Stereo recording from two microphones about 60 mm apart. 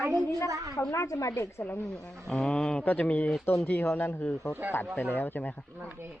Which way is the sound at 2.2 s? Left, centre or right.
Centre.